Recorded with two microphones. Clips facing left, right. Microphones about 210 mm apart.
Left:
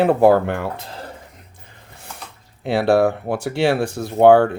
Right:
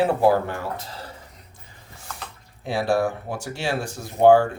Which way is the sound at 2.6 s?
65° left (ahead or behind).